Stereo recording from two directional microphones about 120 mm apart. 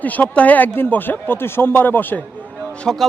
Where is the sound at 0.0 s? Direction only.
15° left (ahead or behind).